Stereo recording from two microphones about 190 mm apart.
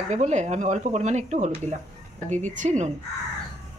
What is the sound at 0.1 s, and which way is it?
Speech, 40° right (ahead or behind).